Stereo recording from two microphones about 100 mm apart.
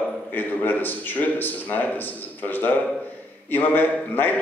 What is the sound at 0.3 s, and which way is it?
A man's voice, 20° left (ahead or behind).